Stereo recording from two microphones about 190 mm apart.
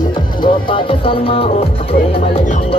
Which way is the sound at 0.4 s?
25° left (ahead or behind).